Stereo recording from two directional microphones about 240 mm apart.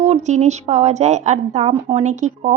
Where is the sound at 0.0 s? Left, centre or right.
Right.